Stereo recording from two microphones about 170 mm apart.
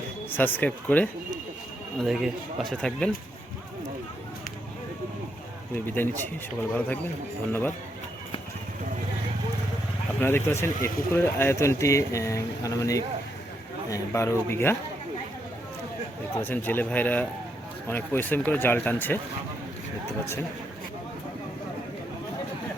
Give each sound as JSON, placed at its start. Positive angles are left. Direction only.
{"t": 0.3, "sound": "speech", "side_deg": 10}
{"t": 5.7, "sound": "speech", "side_deg": 10}
{"t": 10.2, "sound": "speech", "side_deg": 15}
{"t": 16.3, "sound": "speech", "side_deg": 10}